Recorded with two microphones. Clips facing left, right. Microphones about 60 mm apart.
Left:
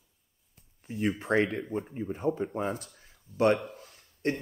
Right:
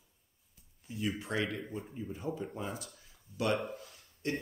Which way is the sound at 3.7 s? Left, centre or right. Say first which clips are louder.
Even; left.